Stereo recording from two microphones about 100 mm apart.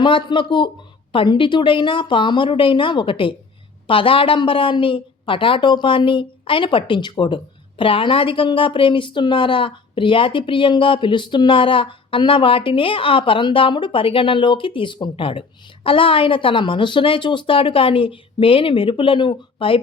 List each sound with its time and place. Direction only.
0.0 s a woman's voice: 55° left (ahead or behind)